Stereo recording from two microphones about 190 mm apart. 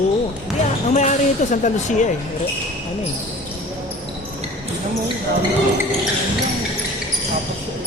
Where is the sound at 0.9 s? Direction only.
40° left (ahead or behind).